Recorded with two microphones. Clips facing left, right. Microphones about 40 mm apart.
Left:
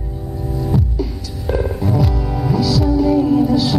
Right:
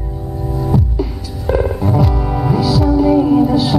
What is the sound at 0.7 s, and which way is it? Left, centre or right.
Hum, centre.